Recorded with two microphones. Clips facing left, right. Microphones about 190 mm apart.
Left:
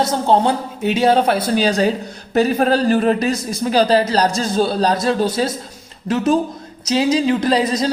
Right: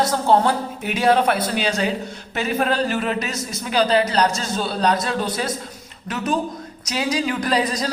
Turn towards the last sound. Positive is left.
turn(degrees=25)  # may be behind; listen again after turning